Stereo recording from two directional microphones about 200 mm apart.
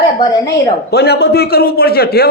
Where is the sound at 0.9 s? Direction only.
55° left (ahead or behind).